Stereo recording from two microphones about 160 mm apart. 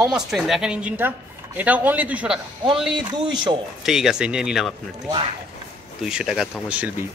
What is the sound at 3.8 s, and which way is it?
Speech, 5° right (ahead or behind).